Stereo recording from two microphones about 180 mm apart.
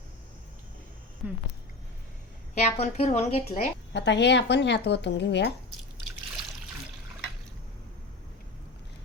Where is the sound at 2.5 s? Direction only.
40° left (ahead or behind).